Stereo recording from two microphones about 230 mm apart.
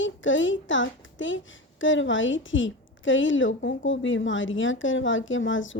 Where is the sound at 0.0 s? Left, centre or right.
Left.